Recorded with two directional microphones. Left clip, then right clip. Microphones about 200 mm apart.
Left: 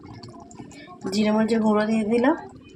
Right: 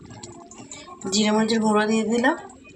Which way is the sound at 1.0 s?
25° left (ahead or behind).